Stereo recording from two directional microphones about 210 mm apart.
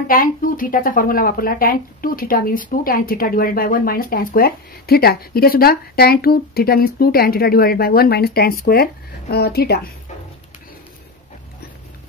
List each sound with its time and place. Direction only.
0.1 s speech: 40° left (ahead or behind)